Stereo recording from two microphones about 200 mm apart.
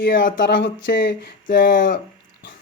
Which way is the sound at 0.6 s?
60° left (ahead or behind).